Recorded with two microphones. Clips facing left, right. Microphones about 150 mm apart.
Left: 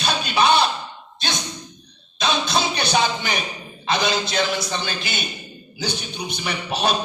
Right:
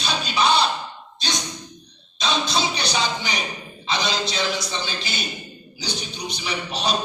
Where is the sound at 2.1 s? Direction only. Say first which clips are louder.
Left 2 dB; 55° left (ahead or behind).